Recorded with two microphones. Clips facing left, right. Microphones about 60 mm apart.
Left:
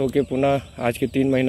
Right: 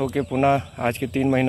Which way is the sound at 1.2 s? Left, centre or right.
Centre.